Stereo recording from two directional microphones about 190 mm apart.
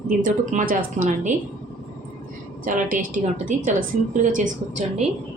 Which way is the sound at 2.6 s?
45° right (ahead or behind).